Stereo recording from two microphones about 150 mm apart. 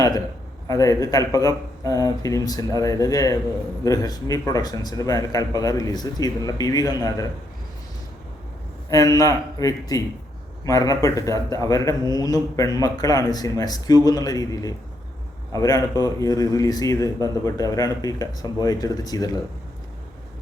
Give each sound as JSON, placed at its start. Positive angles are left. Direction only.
{"t": 0.7, "sound": "a man's voice", "side_deg": 25}
{"t": 8.9, "sound": "a man's voice", "side_deg": 25}